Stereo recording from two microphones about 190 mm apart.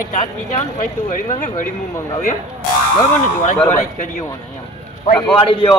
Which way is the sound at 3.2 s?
40° left (ahead or behind).